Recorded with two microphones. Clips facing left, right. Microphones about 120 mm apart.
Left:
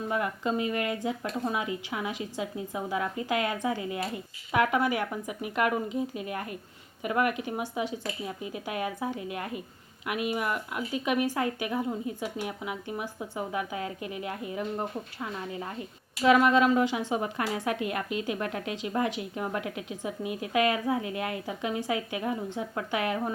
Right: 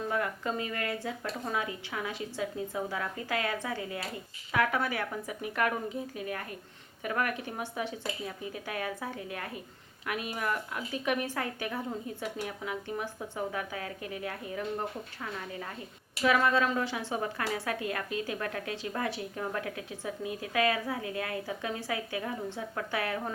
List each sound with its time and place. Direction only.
0.1 s a woman's voice: 20° left (ahead or behind)